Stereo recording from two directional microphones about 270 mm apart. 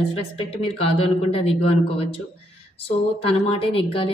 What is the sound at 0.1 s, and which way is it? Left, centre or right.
A woman's voice, left.